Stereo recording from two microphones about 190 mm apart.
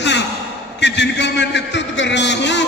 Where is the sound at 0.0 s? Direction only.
65° left (ahead or behind).